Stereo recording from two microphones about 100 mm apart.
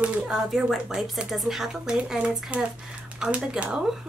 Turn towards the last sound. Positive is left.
turn(degrees=-10)  # may be behind; listen again after turning